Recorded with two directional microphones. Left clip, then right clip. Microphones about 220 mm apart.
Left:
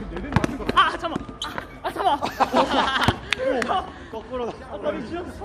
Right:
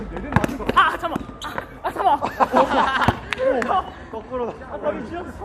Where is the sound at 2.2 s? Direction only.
20° left (ahead or behind).